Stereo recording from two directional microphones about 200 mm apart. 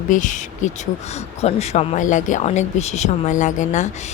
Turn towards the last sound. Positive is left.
turn(degrees=40)  # may be behind; listen again after turning